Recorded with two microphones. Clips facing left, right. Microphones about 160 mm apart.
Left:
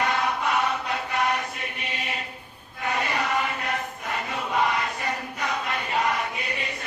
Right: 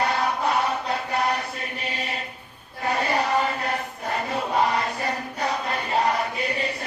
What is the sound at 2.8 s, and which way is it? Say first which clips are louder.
Chant: right 3 dB; 35° right (ahead or behind).